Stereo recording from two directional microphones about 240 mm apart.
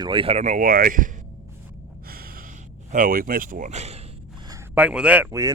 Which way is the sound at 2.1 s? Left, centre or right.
Right.